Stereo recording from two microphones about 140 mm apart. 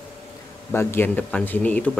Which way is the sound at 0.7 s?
15° left (ahead or behind).